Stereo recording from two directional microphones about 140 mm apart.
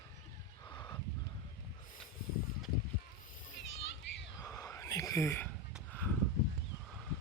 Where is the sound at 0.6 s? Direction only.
30° left (ahead or behind).